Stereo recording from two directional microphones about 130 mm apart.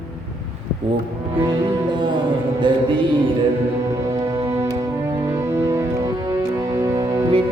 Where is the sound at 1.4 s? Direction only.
35° right (ahead or behind).